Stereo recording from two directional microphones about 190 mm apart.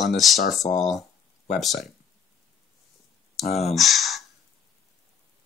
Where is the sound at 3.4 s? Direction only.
35° left (ahead or behind).